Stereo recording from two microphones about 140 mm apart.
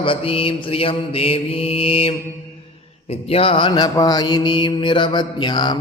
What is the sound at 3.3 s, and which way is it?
Mantra, 40° left (ahead or behind).